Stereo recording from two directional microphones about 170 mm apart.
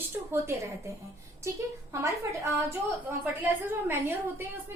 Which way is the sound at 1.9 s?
15° right (ahead or behind).